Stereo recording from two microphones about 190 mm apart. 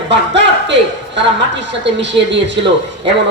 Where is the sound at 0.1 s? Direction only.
70° right (ahead or behind).